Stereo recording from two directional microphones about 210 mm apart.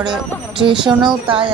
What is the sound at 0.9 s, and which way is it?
Speech, 20° right (ahead or behind).